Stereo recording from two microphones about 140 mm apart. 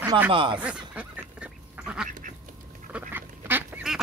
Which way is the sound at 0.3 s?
40° right (ahead or behind).